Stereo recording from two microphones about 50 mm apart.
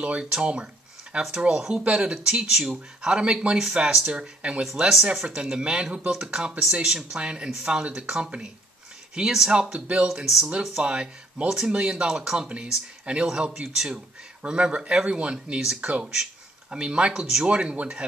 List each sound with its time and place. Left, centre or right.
0.0 s speech: centre
1.6 s speech: centre
1.9 s speech: centre
4.6 s speech: centre
6.6 s speech: centre
10.2 s speech: centre
10.8 s speech: centre
15.6 s speech: centre